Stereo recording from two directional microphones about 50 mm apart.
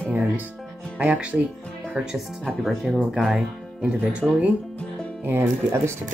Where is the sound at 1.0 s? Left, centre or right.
Right.